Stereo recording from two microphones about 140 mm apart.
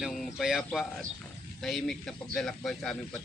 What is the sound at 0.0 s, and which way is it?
Speech, centre (ahead or behind).